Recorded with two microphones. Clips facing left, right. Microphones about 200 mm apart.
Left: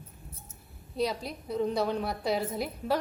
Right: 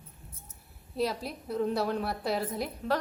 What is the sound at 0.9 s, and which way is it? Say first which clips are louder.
A woman's voice: even; centre (ahead or behind).